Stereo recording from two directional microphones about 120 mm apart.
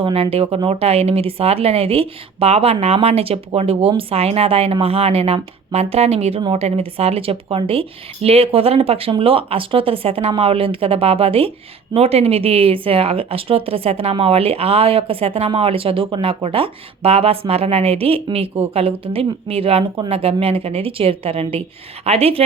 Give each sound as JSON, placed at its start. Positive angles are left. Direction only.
{"t": 0.0, "sound": "speech", "side_deg": -50}